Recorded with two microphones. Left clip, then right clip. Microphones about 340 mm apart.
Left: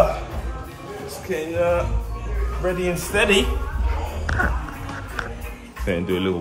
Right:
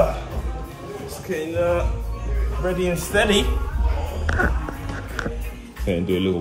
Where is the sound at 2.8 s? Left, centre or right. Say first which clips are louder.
Right 1 dB; centre.